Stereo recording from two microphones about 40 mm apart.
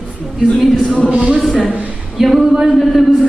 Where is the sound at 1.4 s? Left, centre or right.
Centre.